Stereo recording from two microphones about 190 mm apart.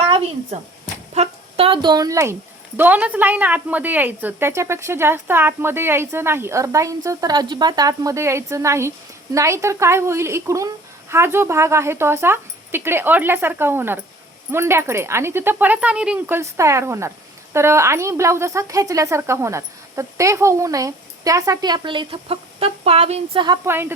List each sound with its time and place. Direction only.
0.0 s a sound: 35° right (ahead or behind)
1.1 s a woman's voice: 35° right (ahead or behind)
23.6 s a woman's voice: 10° right (ahead or behind)